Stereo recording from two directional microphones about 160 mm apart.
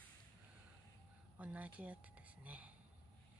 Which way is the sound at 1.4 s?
10° right (ahead or behind).